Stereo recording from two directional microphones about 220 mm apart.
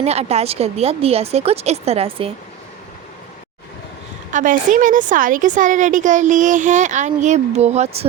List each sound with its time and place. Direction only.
0.0 s a woman's voice: 30° right (ahead or behind)
4.3 s a woman's voice: 35° right (ahead or behind)